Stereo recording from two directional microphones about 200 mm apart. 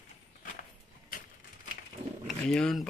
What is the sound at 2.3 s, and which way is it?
Speech, centre (ahead or behind).